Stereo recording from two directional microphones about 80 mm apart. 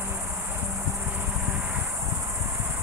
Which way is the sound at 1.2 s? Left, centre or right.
Centre.